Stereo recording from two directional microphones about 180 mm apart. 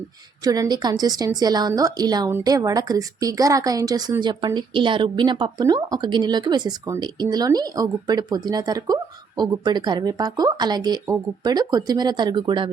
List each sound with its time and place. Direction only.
0.4 s a woman's voice: 20° right (ahead or behind)